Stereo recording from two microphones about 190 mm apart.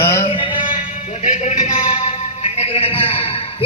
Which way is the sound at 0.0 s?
15° left (ahead or behind).